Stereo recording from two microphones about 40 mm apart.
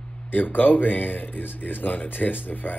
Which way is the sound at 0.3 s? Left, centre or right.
Left.